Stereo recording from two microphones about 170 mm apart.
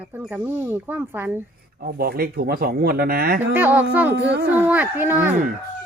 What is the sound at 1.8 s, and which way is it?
Speech, 65° right (ahead or behind).